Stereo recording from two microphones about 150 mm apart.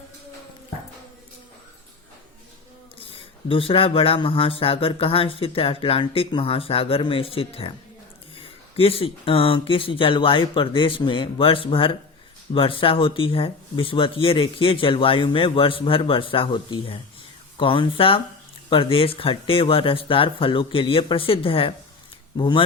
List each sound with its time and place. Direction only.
3.0 s speech: 40° left (ahead or behind)